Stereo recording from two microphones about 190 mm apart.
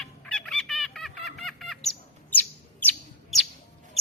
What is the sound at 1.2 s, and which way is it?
Bird, centre (ahead or behind).